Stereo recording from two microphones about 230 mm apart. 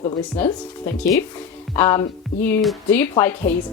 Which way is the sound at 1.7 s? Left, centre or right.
Centre.